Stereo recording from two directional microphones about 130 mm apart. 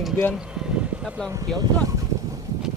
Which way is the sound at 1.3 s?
25° right (ahead or behind).